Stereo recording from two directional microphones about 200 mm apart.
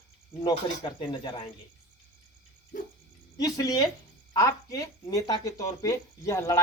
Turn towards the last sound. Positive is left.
turn(degrees=15)  # may be behind; listen again after turning